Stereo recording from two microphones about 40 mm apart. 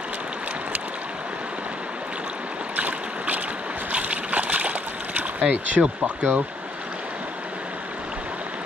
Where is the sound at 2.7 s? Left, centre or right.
Right.